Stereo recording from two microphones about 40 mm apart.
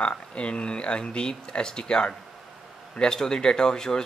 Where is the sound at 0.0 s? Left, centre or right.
Left.